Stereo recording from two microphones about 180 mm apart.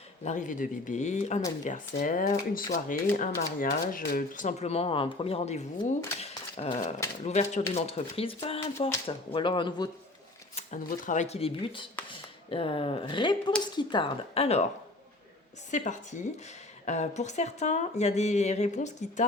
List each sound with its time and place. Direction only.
0.3 s speech: 45° left (ahead or behind)
6.1 s dog: 35° left (ahead or behind)
7.3 s speech: 40° left (ahead or behind)
10.5 s speech: 40° left (ahead or behind)
15.7 s speech: 45° left (ahead or behind)